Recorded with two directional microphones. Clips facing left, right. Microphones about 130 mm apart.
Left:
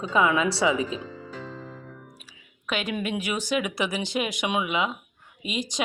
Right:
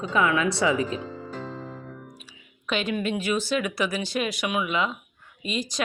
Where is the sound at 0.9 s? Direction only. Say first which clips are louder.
Right 2 dB; 40° right (ahead or behind).